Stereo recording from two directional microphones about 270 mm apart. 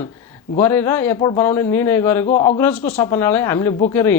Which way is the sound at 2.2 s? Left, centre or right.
Left.